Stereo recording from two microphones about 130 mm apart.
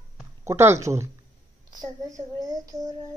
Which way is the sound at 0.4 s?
20° right (ahead or behind).